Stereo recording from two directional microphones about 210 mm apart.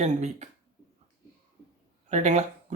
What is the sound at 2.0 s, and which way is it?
Speech, 35° right (ahead or behind).